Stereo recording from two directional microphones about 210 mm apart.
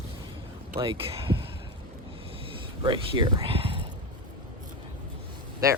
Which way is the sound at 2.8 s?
20° right (ahead or behind).